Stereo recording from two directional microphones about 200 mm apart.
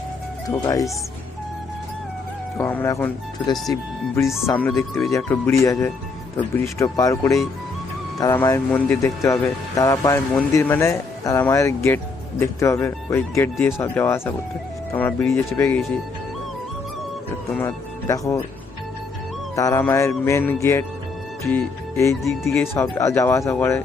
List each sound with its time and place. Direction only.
0.4 s speech: 20° left (ahead or behind)
2.6 s speech: 10° left (ahead or behind)
17.5 s speech: 10° left (ahead or behind)
19.5 s speech: 15° left (ahead or behind)
21.4 s music: 10° left (ahead or behind)
22.3 s speech: 10° left (ahead or behind)